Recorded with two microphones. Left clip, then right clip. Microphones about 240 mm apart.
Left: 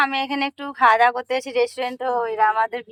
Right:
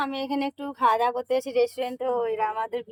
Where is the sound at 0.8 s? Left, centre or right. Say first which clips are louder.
Left 7 dB; centre.